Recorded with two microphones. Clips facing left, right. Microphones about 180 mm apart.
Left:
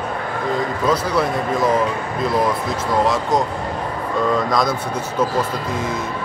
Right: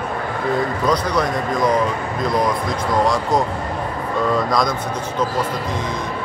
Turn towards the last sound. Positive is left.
turn(degrees=0)  # may be behind; listen again after turning